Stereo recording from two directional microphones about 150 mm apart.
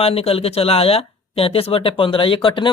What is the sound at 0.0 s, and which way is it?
Speech, 40° left (ahead or behind).